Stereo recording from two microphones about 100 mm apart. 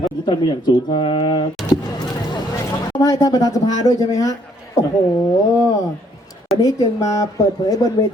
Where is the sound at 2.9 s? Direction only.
40° left (ahead or behind).